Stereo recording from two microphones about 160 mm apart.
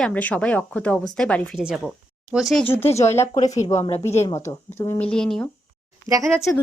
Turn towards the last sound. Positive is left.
turn(degrees=-20)  # may be behind; listen again after turning